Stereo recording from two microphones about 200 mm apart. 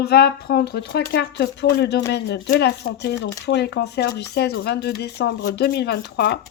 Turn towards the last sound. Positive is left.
turn(degrees=55)  # may be behind; listen again after turning